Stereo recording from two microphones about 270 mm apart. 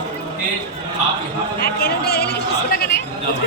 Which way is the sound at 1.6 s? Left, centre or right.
Left.